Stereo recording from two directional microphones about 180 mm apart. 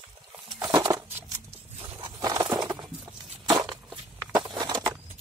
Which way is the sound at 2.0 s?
20° right (ahead or behind).